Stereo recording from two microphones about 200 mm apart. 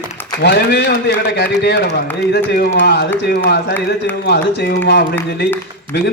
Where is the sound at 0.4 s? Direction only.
60° left (ahead or behind).